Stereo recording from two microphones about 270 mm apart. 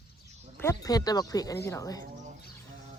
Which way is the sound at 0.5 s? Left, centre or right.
Centre.